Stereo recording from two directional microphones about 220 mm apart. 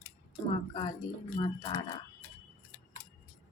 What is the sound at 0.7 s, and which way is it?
Speech, 20° left (ahead or behind).